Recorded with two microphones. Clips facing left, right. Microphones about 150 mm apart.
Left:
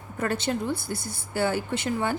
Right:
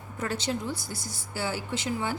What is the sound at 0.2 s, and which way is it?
A woman's voice, 55° left (ahead or behind).